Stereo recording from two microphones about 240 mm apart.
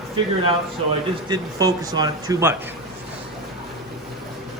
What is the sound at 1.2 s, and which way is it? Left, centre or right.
A man's voice, centre.